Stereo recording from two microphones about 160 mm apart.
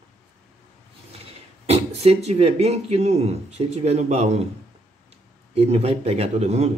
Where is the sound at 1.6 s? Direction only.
40° right (ahead or behind).